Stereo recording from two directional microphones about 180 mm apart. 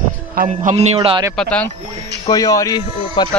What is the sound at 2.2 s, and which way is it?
Speech, 20° left (ahead or behind).